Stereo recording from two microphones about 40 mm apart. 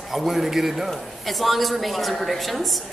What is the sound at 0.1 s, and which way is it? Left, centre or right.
A man's voice, centre.